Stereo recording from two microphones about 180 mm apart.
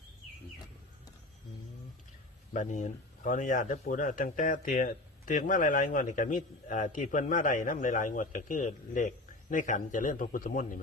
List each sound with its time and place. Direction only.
2.5 s speech: 45° left (ahead or behind)